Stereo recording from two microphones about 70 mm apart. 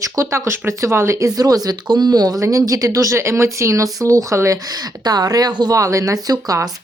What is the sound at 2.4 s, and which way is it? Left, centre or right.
Speech, right.